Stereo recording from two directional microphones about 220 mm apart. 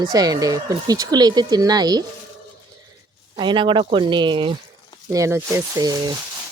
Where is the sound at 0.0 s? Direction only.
15° right (ahead or behind).